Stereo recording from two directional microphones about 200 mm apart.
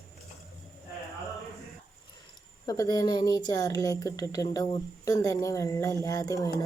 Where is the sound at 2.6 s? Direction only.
20° left (ahead or behind).